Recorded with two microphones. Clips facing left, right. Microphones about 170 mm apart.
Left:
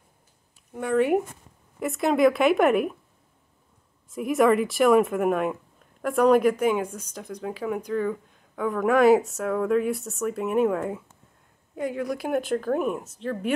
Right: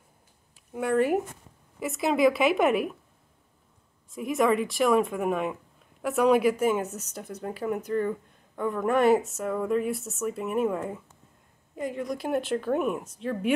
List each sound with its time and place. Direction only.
0.7 s speech: 5° right (ahead or behind)
4.1 s speech: centre (ahead or behind)
11.7 s speech: centre (ahead or behind)
13.3 s speech: 40° left (ahead or behind)